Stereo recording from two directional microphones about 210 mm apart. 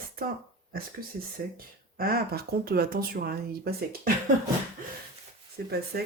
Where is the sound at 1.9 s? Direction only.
45° right (ahead or behind).